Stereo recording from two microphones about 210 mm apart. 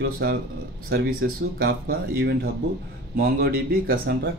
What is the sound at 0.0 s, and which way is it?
Speech, 50° right (ahead or behind).